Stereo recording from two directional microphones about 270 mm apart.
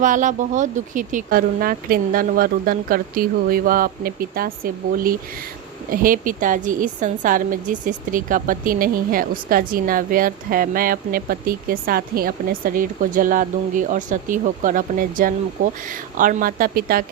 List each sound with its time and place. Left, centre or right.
0.0 s speech: right